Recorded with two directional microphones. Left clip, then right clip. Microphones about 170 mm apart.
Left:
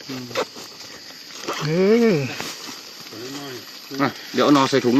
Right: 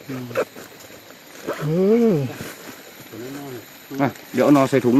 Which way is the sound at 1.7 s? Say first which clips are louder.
Even; 5° right (ahead or behind).